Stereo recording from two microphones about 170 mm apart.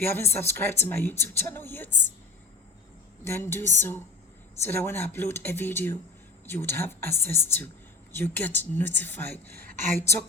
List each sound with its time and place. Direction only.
0.0 s speech: 15° left (ahead or behind)
3.2 s speech: 15° left (ahead or behind)
9.6 s a sound: 55° right (ahead or behind)